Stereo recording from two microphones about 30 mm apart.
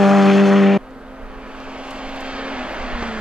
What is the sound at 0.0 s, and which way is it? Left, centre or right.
Vehicle, centre.